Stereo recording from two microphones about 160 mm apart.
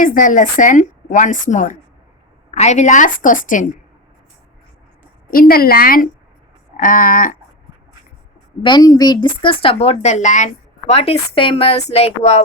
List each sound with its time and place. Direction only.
0.0 s a woman's voice: 55° left (ahead or behind)
5.3 s a woman's voice: 65° left (ahead or behind)
8.6 s speech: 25° left (ahead or behind)